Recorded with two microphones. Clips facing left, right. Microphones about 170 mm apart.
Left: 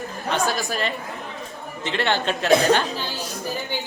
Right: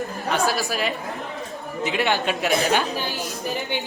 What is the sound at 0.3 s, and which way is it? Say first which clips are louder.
A woman's voice: even; centre (ahead or behind).